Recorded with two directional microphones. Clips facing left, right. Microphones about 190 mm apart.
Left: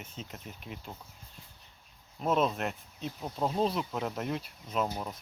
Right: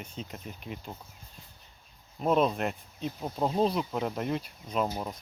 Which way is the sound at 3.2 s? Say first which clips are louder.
Right 2 dB; 15° right (ahead or behind).